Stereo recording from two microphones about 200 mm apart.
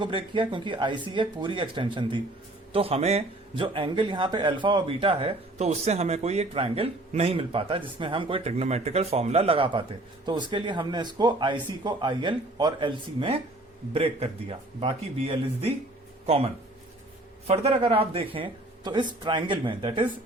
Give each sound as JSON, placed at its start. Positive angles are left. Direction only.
{"t": 0.0, "sound": "speech", "side_deg": -25}